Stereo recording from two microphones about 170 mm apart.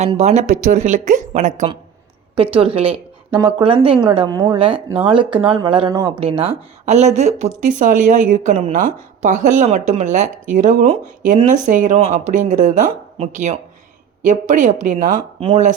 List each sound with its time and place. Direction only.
0.2 s speech: 45° right (ahead or behind)
2.3 s a woman's voice: 30° right (ahead or behind)